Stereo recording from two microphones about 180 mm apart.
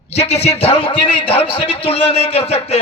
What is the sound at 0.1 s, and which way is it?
A man's voice, 35° left (ahead or behind).